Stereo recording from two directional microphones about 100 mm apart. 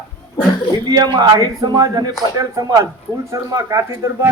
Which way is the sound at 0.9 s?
45° right (ahead or behind).